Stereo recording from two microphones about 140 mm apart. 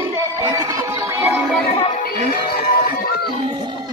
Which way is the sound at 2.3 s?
90° left.